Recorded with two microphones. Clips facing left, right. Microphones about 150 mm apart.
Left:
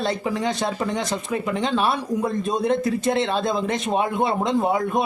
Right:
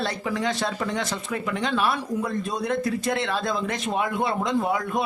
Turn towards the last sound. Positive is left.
turn(degrees=20)  # may be behind; listen again after turning